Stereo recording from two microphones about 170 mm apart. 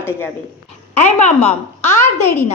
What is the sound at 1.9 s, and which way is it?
Speech, 15° left (ahead or behind).